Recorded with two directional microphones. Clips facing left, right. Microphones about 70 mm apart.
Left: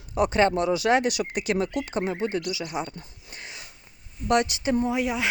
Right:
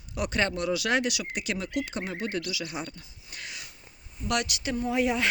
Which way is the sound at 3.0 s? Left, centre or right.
Left.